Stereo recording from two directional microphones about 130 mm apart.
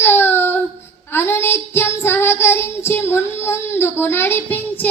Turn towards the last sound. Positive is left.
turn(degrees=15)  # may be behind; listen again after turning